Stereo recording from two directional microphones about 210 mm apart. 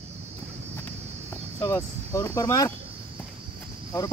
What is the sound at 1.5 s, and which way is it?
Speech, 15° left (ahead or behind).